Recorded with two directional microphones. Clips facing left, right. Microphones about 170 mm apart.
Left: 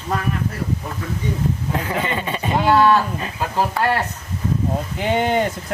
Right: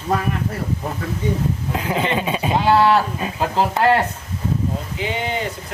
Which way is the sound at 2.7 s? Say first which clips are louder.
Even; 25° right (ahead or behind).